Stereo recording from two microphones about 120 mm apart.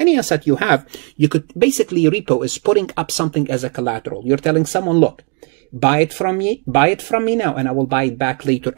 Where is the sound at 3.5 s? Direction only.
20° right (ahead or behind).